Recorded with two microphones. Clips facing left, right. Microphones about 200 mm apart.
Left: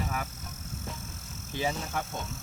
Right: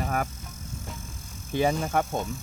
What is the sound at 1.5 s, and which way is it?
Speech, 55° right (ahead or behind).